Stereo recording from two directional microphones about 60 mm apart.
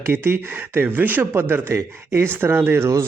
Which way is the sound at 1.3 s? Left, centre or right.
Right.